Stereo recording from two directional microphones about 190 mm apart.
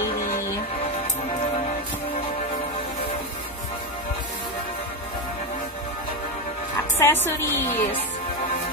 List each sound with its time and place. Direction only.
7.0 s a woman's voice: 10° left (ahead or behind)